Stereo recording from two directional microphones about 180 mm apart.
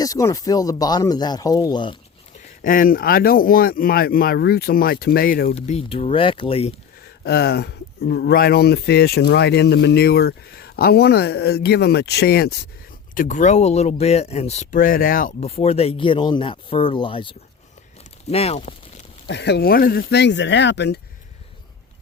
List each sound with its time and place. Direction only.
0.0 s speech: 20° left (ahead or behind)
2.4 s speech: 50° left (ahead or behind)
5.5 s speech: 35° left (ahead or behind)
7.3 s speech: 60° left (ahead or behind)
13.1 s speech: 45° left (ahead or behind)
15.4 s speech: 35° left (ahead or behind)
19.3 s speech: 70° left (ahead or behind)